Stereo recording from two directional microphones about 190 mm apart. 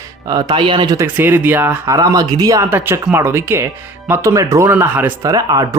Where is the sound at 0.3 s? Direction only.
20° right (ahead or behind).